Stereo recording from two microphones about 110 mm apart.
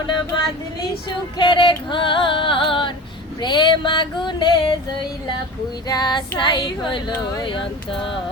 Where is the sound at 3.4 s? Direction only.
45° left (ahead or behind).